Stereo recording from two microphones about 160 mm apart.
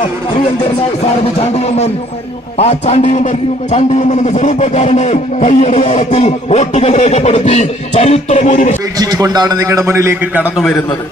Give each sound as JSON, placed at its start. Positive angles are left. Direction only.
{"t": 1.4, "sound": "a man's voice", "side_deg": 40}
{"t": 8.9, "sound": "a man's voice", "side_deg": -25}